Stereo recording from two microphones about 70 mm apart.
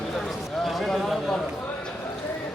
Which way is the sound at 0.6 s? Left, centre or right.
Centre.